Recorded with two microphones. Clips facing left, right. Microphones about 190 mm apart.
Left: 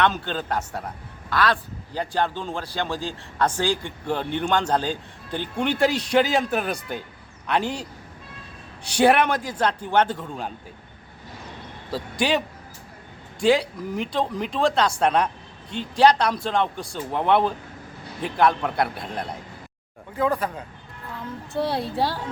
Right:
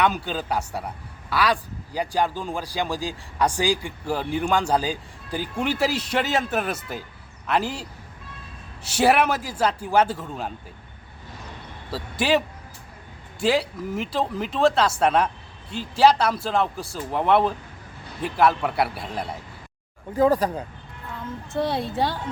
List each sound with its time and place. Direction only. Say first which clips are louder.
0.0 s a man's voice: even; 5° right (ahead or behind)
11.9 s speech: right 1 dB; centre (ahead or behind)
13.4 s speech: left 2 dB; centre (ahead or behind)
20.1 s speech: right 5 dB; 40° right (ahead or behind)
21.5 s speech: even; centre (ahead or behind)